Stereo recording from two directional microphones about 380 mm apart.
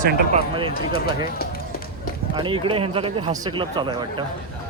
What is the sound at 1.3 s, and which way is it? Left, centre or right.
Run, left.